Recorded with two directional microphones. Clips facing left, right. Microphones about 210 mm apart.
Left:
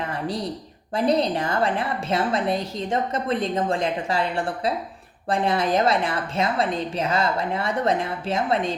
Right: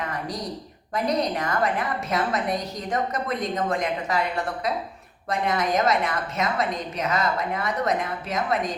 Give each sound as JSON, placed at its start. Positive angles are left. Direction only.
{"t": 0.9, "sound": "a woman's voice", "side_deg": 30}